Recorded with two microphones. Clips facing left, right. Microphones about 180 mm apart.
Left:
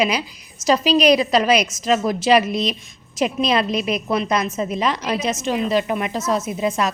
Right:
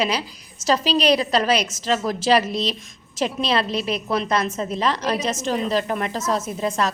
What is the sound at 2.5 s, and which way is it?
Speech, 35° right (ahead or behind).